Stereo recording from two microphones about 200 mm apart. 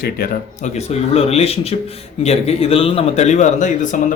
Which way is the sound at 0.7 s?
30° left (ahead or behind).